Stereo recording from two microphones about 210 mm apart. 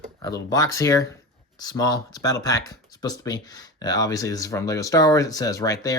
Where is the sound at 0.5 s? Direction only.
15° left (ahead or behind).